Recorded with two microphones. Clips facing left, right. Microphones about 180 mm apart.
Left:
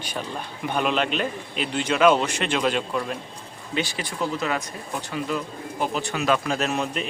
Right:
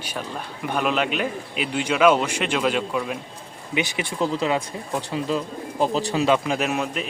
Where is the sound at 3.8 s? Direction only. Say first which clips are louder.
Right 3 dB; 20° right (ahead or behind).